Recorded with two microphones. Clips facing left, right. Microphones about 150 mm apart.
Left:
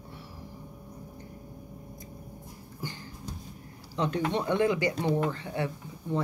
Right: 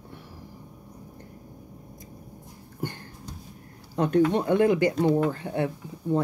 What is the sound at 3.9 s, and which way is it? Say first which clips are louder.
Speech: right 7 dB; 55° right (ahead or behind).